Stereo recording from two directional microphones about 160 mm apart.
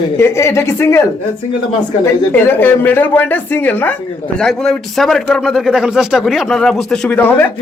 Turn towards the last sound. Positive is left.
turn(degrees=10)  # may be behind; listen again after turning